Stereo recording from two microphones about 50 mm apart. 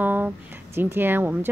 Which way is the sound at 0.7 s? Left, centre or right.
Right.